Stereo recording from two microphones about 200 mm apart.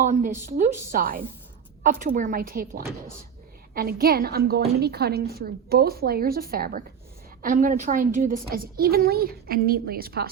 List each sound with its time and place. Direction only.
0.0 s a woman's voice: 40° right (ahead or behind)